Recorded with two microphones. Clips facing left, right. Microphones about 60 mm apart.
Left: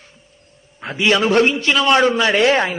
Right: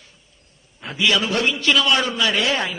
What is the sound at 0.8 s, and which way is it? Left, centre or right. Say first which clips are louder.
A man's voice: left 4 dB; left.